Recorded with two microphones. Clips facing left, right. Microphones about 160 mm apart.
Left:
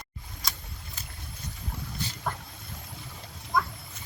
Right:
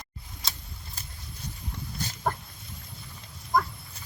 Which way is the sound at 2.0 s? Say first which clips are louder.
Right 1 dB; 45° right (ahead or behind).